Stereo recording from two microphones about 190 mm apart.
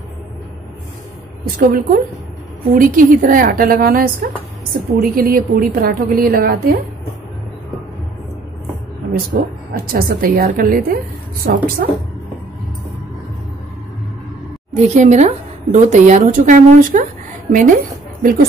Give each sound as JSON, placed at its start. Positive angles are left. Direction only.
{"t": 1.6, "sound": "a woman's voice", "side_deg": -45}
{"t": 9.3, "sound": "a woman's voice", "side_deg": -50}
{"t": 14.7, "sound": "a woman's voice", "side_deg": -35}